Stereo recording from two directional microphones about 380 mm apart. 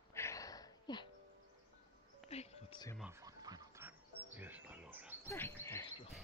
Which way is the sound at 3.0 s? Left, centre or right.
Centre.